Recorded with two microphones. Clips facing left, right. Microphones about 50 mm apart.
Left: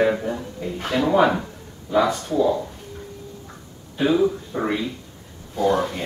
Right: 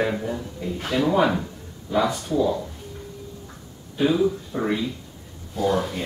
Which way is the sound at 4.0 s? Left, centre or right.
Centre.